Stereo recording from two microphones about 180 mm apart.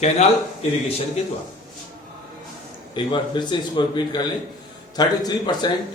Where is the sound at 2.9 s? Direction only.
25° left (ahead or behind).